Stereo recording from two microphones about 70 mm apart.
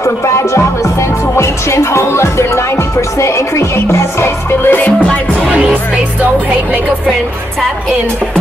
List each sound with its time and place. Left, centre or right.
1.3 s music: left
5.5 s music: right